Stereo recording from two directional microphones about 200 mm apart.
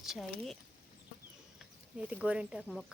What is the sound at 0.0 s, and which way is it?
Speech, centre (ahead or behind).